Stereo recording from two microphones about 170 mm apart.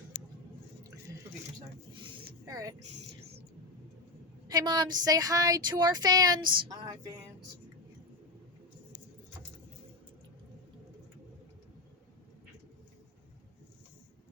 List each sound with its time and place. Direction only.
2.5 s a woman's voice: 20° right (ahead or behind)
4.4 s speech: 25° right (ahead or behind)